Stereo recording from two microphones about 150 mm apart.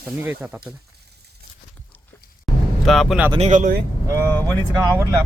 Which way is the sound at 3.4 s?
55° right (ahead or behind).